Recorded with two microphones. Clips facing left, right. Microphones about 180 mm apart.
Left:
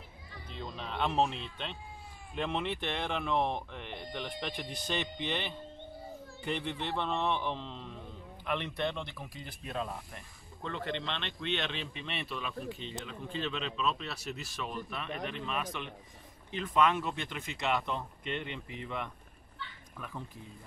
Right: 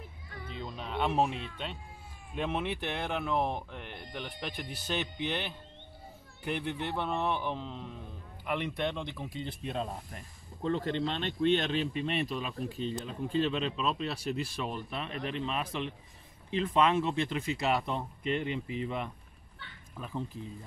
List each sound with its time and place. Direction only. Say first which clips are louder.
0.6 s speech: right 1 dB; 10° right (ahead or behind); by 18.0 s 35° right (ahead or behind)
20.0 s speech: right 6 dB; 25° right (ahead or behind)